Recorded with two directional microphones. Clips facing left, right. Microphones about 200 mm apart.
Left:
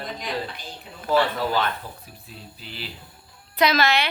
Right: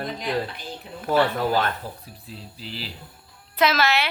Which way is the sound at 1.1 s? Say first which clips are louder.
Right 1 dB; 50° right (ahead or behind).